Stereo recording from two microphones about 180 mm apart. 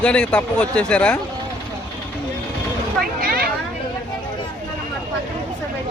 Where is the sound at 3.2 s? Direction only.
55° right (ahead or behind).